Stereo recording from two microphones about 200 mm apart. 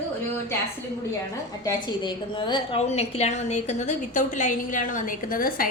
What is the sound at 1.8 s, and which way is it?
A woman's voice, 20° left (ahead or behind).